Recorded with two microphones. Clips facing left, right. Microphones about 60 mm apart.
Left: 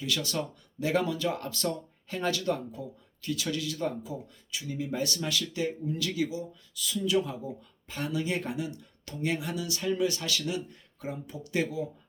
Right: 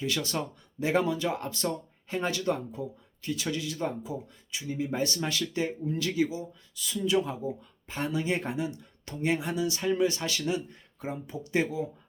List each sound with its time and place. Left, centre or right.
0.0 s speech: right